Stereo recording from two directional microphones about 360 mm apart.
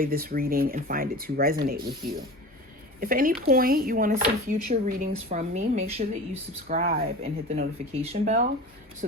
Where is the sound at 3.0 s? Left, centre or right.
Right.